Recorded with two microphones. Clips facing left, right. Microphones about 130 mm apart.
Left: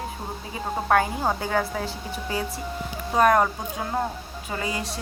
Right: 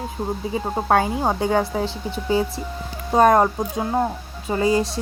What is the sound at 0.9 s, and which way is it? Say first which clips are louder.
Speech: right 2 dB; 25° right (ahead or behind).